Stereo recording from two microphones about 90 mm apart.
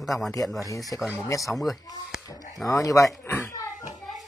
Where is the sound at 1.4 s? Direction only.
Centre (ahead or behind).